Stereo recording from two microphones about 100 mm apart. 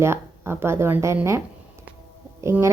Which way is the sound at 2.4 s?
30° right (ahead or behind).